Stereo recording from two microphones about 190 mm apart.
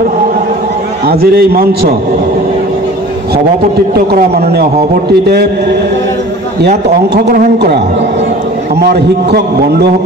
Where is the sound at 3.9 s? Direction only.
55° right (ahead or behind).